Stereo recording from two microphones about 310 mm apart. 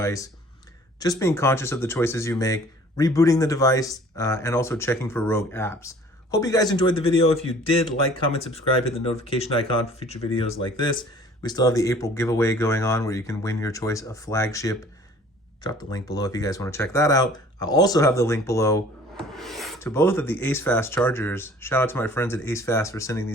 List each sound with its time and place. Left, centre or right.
0.0 s speech: centre